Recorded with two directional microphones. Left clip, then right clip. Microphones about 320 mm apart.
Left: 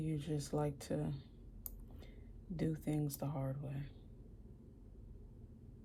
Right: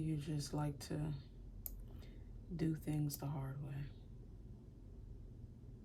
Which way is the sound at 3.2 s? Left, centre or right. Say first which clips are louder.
Left 5 dB; centre.